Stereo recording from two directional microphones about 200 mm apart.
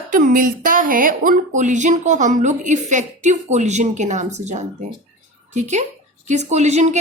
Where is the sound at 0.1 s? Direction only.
40° right (ahead or behind).